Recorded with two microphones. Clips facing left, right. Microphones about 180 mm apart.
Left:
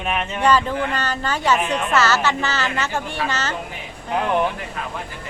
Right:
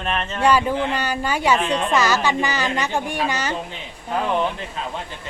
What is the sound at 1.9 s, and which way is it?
A woman's voice, 15° right (ahead or behind).